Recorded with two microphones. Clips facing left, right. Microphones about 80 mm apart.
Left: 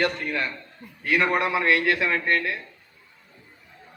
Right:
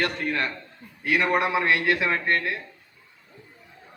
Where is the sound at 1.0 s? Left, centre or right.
Centre.